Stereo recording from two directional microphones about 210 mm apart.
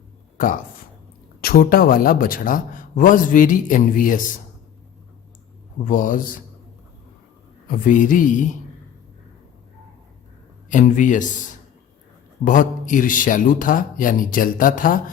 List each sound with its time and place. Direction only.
0.3 s a man's voice: 40° left (ahead or behind)
5.8 s a man's voice: 40° left (ahead or behind)
7.7 s a man's voice: 40° left (ahead or behind)
10.7 s a man's voice: 40° left (ahead or behind)
12.5 s a man's voice: 40° left (ahead or behind)